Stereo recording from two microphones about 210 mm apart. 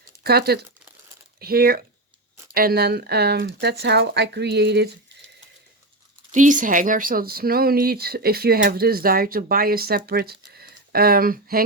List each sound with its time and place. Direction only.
0.2 s speech: 50° right (ahead or behind)
6.3 s speech: 35° right (ahead or behind)